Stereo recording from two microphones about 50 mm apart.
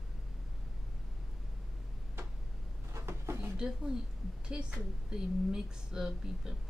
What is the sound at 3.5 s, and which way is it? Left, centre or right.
Speech, centre.